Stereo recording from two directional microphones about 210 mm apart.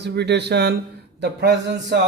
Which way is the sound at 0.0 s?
50° right (ahead or behind).